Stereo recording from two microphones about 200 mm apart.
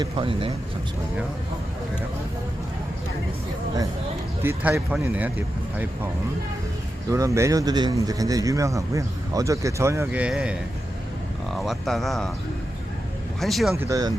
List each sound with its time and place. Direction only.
0.0 s speech: 25° right (ahead or behind)
4.4 s a man's voice: 10° right (ahead or behind)
7.1 s a man's voice: 15° right (ahead or behind); by 12.3 s centre (ahead or behind)
13.4 s speech: centre (ahead or behind)
13.7 s a man's voice: 15° right (ahead or behind)